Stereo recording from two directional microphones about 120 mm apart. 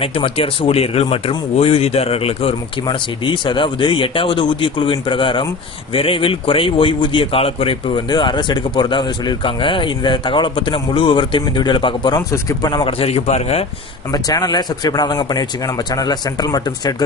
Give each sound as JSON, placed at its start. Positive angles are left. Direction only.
{"t": 0.0, "sound": "speech", "side_deg": 50}
{"t": 8.1, "sound": "speech", "side_deg": 40}
{"t": 13.0, "sound": "speech", "side_deg": 60}
{"t": 14.1, "sound": "speech", "side_deg": 35}